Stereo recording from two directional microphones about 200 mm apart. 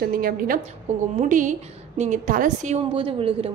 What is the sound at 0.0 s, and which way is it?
A woman's voice, 45° right (ahead or behind).